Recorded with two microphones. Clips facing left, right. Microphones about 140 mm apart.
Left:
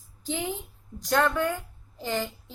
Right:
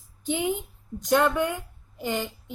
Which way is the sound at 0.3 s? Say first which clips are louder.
Right 5 dB; 20° right (ahead or behind).